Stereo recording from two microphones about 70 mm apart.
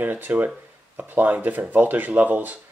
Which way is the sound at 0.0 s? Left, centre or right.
Right.